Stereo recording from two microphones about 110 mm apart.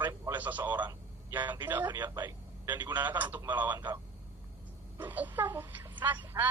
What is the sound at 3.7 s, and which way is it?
Speech, 40° right (ahead or behind).